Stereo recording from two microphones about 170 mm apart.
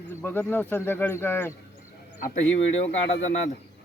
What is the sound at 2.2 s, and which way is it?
Speech, 40° left (ahead or behind).